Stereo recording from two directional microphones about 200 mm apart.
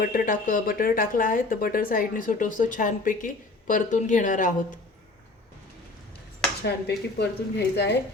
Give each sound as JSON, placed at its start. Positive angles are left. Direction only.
{"t": 0.0, "sound": "speech", "side_deg": 45}
{"t": 6.6, "sound": "speech", "side_deg": 55}